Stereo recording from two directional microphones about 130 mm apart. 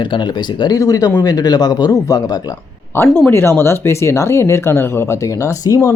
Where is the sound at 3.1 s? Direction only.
20° left (ahead or behind).